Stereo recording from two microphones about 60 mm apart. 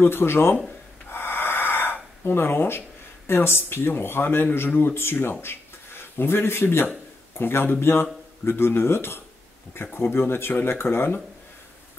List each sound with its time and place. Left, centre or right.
0.0 s a man's voice: left
1.1 s a sound: left
3.3 s a man's voice: left